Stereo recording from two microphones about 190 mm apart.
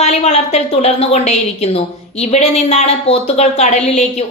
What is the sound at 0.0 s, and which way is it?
A woman's voice, 35° left (ahead or behind).